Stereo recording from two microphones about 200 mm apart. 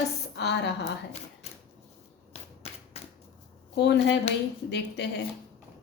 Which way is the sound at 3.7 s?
60° left (ahead or behind).